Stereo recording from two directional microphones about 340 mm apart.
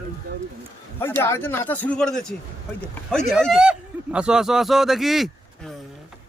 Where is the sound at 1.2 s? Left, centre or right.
Centre.